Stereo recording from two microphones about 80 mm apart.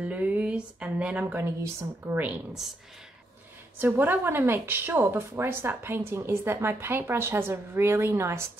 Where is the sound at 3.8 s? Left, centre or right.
Right.